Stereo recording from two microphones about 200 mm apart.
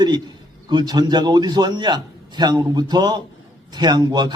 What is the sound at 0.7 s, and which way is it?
Speech, 20° right (ahead or behind).